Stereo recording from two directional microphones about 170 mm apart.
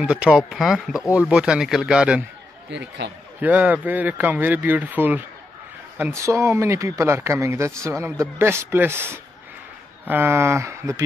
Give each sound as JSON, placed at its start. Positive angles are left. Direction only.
{"t": 0.0, "sound": "speech", "side_deg": -5}
{"t": 2.7, "sound": "speech", "side_deg": -90}
{"t": 3.3, "sound": "speech", "side_deg": -10}
{"t": 10.0, "sound": "speech", "side_deg": -10}